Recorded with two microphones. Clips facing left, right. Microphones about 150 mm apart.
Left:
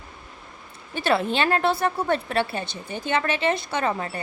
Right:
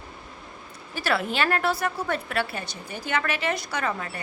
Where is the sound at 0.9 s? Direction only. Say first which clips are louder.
Left 3 dB; 25° left (ahead or behind).